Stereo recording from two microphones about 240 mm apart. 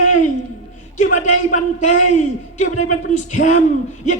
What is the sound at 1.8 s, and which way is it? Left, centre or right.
A man's voice, left.